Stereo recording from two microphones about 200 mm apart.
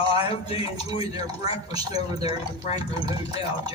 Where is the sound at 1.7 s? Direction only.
20° right (ahead or behind).